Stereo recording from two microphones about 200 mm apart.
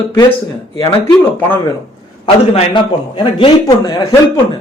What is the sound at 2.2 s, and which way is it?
A man's voice, 25° left (ahead or behind).